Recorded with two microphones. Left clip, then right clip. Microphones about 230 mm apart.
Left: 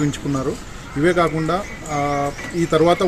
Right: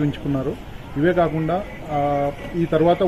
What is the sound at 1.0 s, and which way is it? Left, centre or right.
Speech, centre.